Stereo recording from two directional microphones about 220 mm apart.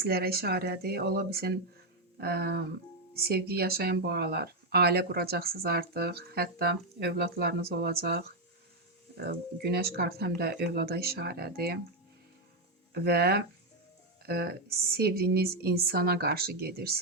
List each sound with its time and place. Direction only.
0.0 s speech: 45° right (ahead or behind)
12.9 s speech: 45° right (ahead or behind)